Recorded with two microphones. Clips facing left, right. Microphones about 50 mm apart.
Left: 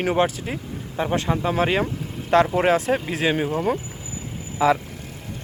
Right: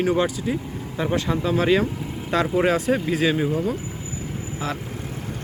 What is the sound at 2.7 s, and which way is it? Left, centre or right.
Speech, left.